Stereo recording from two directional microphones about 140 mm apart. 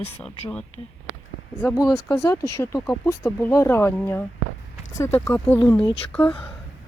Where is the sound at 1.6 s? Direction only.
20° left (ahead or behind).